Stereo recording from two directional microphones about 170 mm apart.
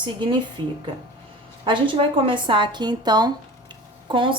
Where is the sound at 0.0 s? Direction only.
25° right (ahead or behind).